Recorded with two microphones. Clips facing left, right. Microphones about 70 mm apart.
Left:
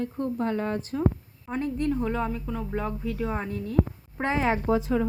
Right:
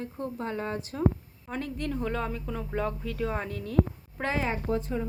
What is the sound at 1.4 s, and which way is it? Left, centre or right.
A woman's voice, centre.